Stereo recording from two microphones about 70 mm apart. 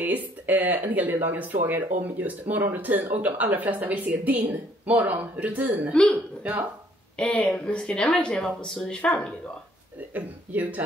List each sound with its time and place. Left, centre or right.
0.0 s speech: right
7.2 s speech: centre
10.1 s speech: right